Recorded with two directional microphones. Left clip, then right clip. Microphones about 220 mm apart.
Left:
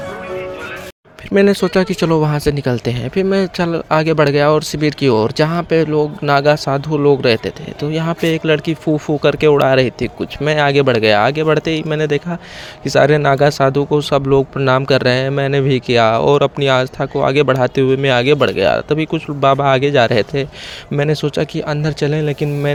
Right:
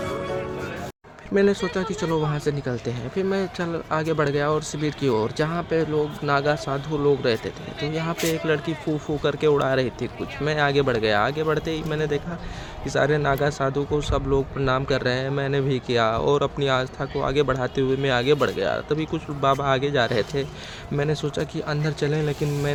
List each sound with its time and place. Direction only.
1.3 s speech: 40° left (ahead or behind)